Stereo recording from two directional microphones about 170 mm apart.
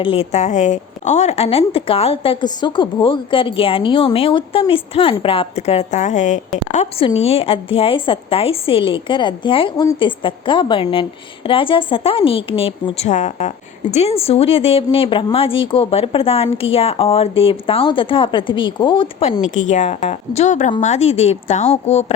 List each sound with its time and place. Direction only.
0.0 s a woman's voice: 35° left (ahead or behind)
19.5 s a woman's voice: 45° left (ahead or behind)